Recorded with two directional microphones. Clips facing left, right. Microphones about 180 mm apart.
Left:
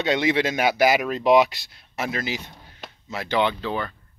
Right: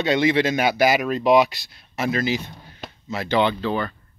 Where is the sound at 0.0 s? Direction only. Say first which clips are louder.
Right 2 dB; 20° left (ahead or behind).